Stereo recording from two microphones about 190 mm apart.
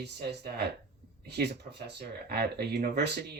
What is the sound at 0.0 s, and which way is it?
Speech, 60° right (ahead or behind).